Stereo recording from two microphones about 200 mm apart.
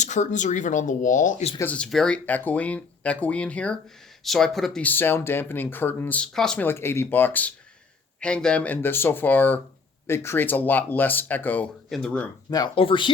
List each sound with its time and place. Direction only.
0.0 s speech: 35° left (ahead or behind)
1.5 s speech: 5° left (ahead or behind)
12.5 s speech: 20° left (ahead or behind)